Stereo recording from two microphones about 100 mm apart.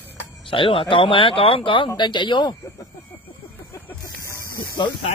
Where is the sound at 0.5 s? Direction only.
60° left (ahead or behind).